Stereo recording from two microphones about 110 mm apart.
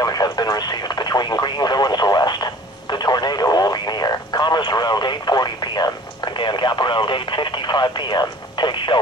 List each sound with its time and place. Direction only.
0.0 s radio: 35° left (ahead or behind)